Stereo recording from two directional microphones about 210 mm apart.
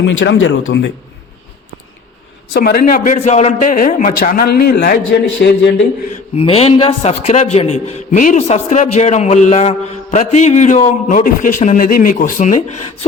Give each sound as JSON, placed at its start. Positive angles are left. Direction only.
{"t": 0.0, "sound": "speech", "side_deg": 60}
{"t": 2.5, "sound": "a man's voice", "side_deg": 50}
{"t": 6.3, "sound": "a man's voice", "side_deg": 30}